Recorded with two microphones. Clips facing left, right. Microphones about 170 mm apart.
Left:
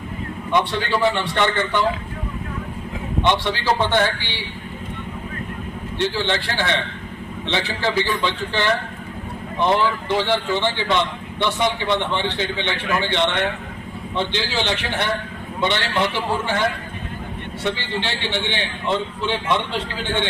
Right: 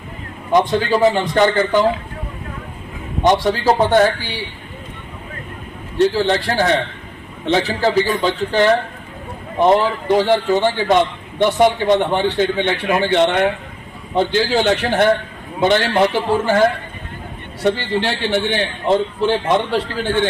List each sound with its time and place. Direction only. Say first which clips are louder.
0.5 s a man's voice: right 6 dB; 40° right (ahead or behind)
3.2 s a man's voice: right 6 dB; 40° right (ahead or behind)
6.0 s a man's voice: right 7 dB; 40° right (ahead or behind)